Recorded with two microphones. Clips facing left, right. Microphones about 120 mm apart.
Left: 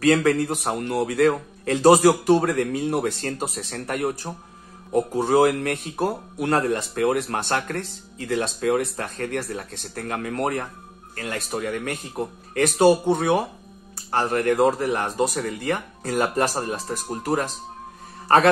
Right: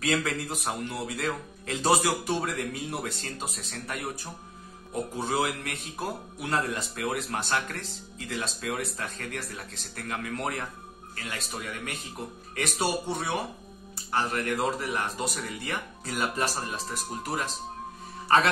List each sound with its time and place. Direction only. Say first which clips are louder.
0.0 s speech: left 10 dB; 55° left (ahead or behind)
2.2 s speech: left 11 dB; 45° left (ahead or behind)
3.5 s speech: left 8 dB; 60° left (ahead or behind)
5.3 s speech: left 12 dB; 55° left (ahead or behind)